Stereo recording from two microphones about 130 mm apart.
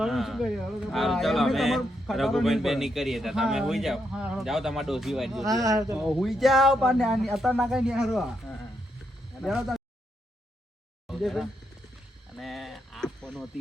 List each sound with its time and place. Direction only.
0.0 s speech: centre (ahead or behind)
5.5 s speech: 25° right (ahead or behind)
6.0 s speech: centre (ahead or behind)
9.5 s speech: 5° right (ahead or behind)
11.2 s speech: centre (ahead or behind)
12.3 s a sound: centre (ahead or behind)